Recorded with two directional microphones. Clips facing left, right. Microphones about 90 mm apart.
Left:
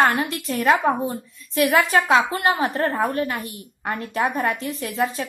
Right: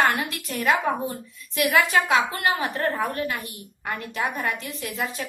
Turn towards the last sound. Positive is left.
turn(degrees=35)  # may be behind; listen again after turning